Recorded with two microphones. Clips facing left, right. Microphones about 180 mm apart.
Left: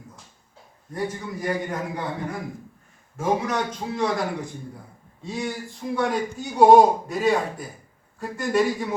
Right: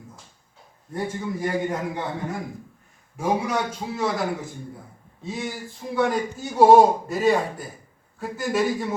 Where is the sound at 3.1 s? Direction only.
10° right (ahead or behind).